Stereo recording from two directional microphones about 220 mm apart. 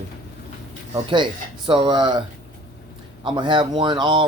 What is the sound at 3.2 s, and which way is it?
Speech, 20° right (ahead or behind).